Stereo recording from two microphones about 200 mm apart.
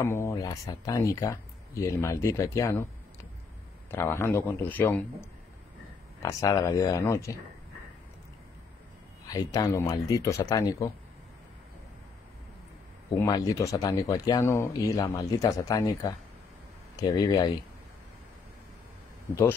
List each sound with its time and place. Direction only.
0.0 s speech: 10° left (ahead or behind)
3.9 s speech: 10° left (ahead or behind)
9.3 s speech: 15° left (ahead or behind)
13.2 s speech: 20° left (ahead or behind)